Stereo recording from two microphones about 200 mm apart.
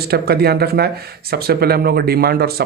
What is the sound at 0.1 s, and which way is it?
Speech, 50° right (ahead or behind).